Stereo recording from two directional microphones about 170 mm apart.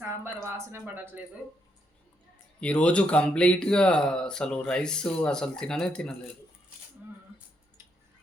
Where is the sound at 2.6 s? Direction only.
5° left (ahead or behind).